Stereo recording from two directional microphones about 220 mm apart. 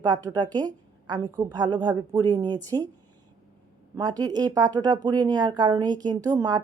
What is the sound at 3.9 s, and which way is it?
Speech, 20° right (ahead or behind).